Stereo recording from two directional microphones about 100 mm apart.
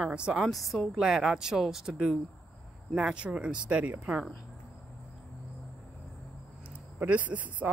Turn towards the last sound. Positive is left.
turn(degrees=-15)  # may be behind; listen again after turning